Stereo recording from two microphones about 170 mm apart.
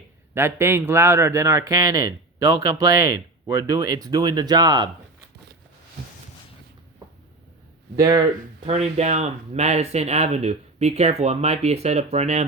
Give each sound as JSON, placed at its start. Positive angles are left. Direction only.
{"t": 0.3, "sound": "speech", "side_deg": -15}
{"t": 7.9, "sound": "speech", "side_deg": -20}
{"t": 8.6, "sound": "speech", "side_deg": -40}